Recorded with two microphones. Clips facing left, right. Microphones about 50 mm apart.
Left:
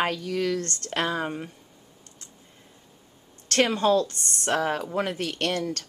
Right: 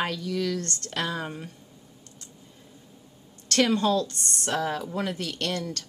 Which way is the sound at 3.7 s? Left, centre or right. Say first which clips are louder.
Left 2 dB; left.